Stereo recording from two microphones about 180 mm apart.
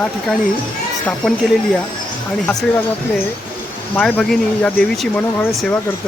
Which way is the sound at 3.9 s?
5° left (ahead or behind).